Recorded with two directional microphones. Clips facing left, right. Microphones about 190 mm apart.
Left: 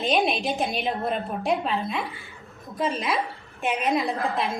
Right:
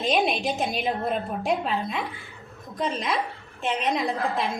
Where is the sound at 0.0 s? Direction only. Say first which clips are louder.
Even; centre (ahead or behind).